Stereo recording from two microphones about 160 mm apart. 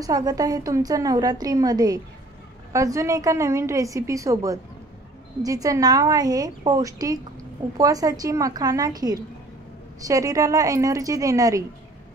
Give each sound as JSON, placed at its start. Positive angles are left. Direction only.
{"t": 0.0, "sound": "a woman's voice", "side_deg": -25}